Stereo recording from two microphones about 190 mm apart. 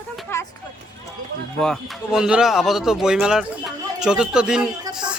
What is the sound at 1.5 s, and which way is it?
Speech, centre (ahead or behind).